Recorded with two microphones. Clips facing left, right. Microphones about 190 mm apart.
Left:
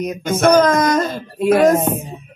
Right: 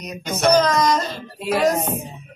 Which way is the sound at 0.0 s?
50° left (ahead or behind).